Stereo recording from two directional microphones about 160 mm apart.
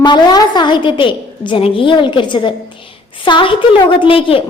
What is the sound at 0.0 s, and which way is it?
A woman's voice, 25° left (ahead or behind).